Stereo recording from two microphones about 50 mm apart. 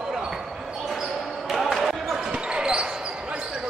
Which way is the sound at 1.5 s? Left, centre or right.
Centre.